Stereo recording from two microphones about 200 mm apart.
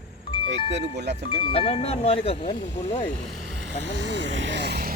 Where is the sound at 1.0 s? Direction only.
60° right (ahead or behind).